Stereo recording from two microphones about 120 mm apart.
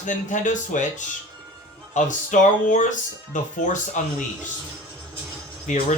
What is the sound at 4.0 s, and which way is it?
Speech, 90° left.